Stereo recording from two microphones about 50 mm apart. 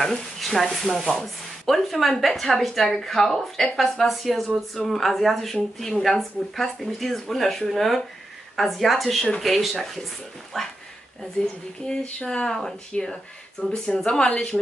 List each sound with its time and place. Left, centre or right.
0.0 s speech: centre
12.0 s a woman's voice: centre